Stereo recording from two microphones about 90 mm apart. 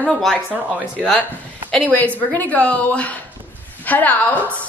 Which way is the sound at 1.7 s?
15° left (ahead or behind).